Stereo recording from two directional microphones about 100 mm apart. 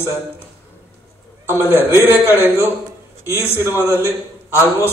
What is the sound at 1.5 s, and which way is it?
A man's voice, 20° right (ahead or behind).